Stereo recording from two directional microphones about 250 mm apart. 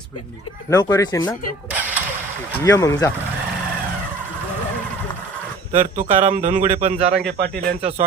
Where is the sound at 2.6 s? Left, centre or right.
Centre.